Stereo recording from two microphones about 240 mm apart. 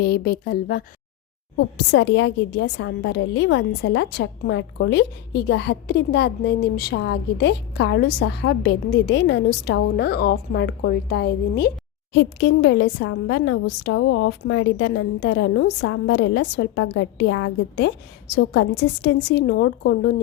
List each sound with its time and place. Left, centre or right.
0.0 s a woman's voice: left